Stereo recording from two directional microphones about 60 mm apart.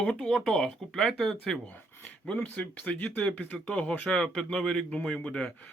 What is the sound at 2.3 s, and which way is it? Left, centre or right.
Speech, left.